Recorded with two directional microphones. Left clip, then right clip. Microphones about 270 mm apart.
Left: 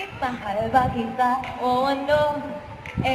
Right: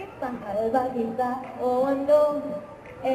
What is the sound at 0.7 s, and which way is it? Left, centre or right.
Music, centre.